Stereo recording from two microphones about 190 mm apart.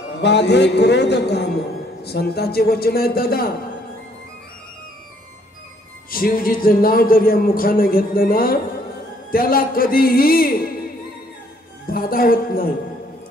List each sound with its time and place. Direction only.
0.1 s a man's voice: 65° left (ahead or behind)
6.0 s a man's voice: 50° left (ahead or behind)
11.9 s a man's voice: 50° left (ahead or behind)